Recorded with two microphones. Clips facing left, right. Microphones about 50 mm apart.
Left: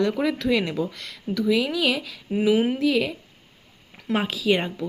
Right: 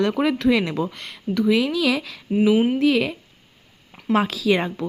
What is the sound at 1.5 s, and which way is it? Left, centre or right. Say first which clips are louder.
Speech: right 2 dB; right.